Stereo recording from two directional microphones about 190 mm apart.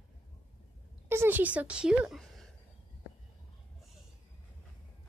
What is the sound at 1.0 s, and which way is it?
A woman's voice, 10° right (ahead or behind).